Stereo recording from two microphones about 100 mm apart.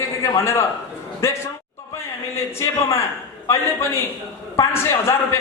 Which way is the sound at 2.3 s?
30° left (ahead or behind).